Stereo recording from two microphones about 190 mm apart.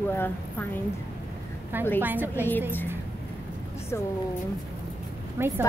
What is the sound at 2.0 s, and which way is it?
Speech, 10° right (ahead or behind).